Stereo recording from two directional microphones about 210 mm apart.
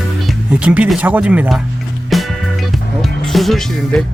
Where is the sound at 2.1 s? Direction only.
Centre (ahead or behind).